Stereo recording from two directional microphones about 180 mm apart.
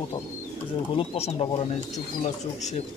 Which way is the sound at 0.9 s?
35° left (ahead or behind).